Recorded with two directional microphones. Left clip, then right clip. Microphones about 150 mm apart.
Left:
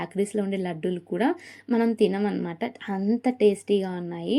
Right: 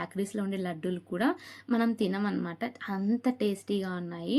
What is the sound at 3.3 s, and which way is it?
Speech, 40° right (ahead or behind).